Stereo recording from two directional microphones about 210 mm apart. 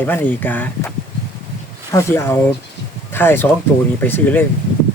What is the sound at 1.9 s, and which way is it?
Speech, 10° left (ahead or behind).